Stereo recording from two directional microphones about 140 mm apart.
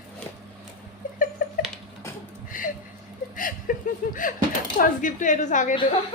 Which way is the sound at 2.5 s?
75° left (ahead or behind).